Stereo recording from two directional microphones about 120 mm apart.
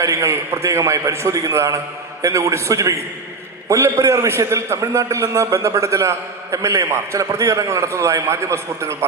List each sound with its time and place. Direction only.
0.0 s a man's voice: 25° right (ahead or behind)